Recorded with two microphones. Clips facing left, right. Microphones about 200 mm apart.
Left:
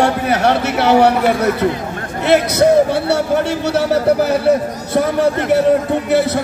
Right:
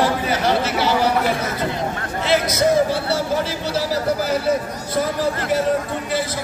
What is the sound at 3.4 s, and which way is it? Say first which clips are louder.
A man's voice: left 6 dB; 65° left (ahead or behind).